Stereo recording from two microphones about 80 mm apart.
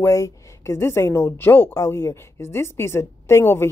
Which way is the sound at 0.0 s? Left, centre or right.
Left.